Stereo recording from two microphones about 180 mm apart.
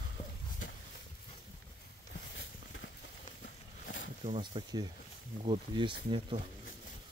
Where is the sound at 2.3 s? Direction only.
80° left.